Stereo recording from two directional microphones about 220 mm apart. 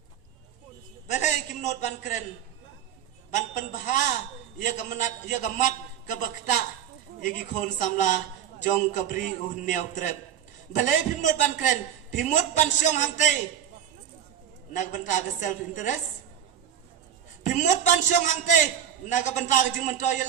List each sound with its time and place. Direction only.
1.0 s a sound: 35° left (ahead or behind)
3.3 s a man's voice: 35° left (ahead or behind)
14.7 s a man's voice: 35° left (ahead or behind)
17.4 s a man's voice: 35° left (ahead or behind)